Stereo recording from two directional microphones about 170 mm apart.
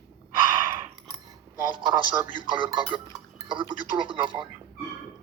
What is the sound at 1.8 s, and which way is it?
A woman's voice, 25° right (ahead or behind).